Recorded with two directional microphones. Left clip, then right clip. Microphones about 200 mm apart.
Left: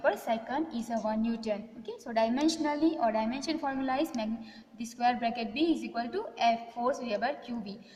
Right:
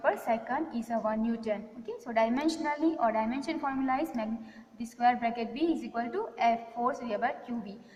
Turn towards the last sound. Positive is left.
turn(degrees=55)  # may be behind; listen again after turning